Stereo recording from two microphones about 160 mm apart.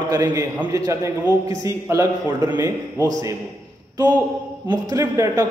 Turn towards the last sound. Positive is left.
turn(degrees=-20)  # may be behind; listen again after turning